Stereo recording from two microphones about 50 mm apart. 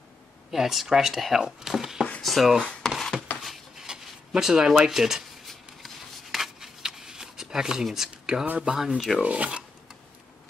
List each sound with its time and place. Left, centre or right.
0.5 s speech: centre
2.8 s a sound: centre
3.4 s a sound: centre
3.8 s speech: centre
6.3 s shuffling cards: centre
8.7 s speech: centre
9.2 s filing: right